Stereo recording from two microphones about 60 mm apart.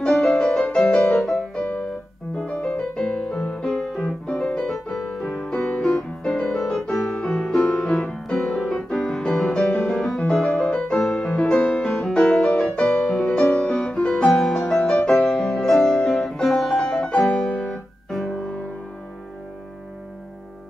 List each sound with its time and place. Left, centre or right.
0.0 s music: centre
8.3 s music: centre